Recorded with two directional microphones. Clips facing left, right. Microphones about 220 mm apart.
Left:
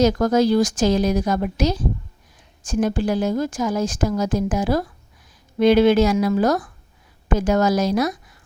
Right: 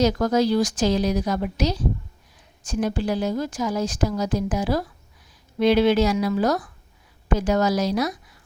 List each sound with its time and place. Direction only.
0.0 s a woman's voice: 50° left (ahead or behind)